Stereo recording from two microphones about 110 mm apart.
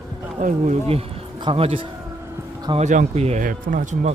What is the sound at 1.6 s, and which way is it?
Speech, 60° right (ahead or behind).